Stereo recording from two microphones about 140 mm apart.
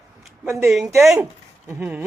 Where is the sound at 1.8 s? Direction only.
15° right (ahead or behind).